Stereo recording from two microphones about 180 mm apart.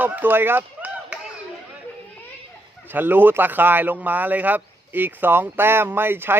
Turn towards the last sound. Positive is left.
turn(degrees=-10)  # may be behind; listen again after turning